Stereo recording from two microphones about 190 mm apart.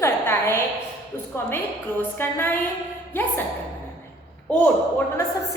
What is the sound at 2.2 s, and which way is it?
Speech, 10° left (ahead or behind).